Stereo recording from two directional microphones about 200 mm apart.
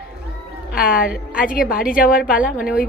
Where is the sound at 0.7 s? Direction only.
45° left (ahead or behind).